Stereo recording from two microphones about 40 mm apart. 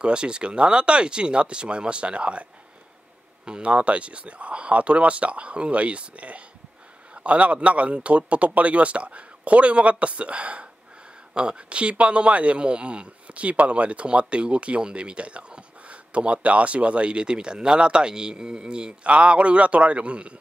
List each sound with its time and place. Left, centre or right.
0.0 s speech: right
3.4 s speech: right